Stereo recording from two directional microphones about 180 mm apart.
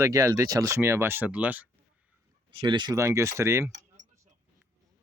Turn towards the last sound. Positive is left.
turn(degrees=-15)  # may be behind; listen again after turning